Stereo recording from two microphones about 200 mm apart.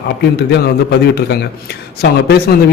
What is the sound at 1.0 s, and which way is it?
A man's voice, 55° left (ahead or behind).